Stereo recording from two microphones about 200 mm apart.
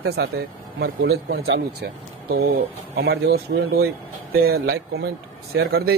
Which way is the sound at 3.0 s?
55° right (ahead or behind).